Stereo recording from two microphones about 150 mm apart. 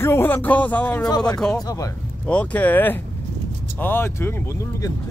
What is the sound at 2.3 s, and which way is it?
Speech, 10° left (ahead or behind).